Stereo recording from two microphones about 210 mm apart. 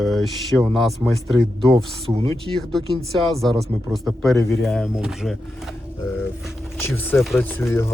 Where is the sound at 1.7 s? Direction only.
25° right (ahead or behind).